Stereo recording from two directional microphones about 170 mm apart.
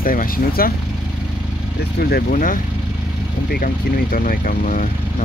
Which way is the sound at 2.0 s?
55° left (ahead or behind).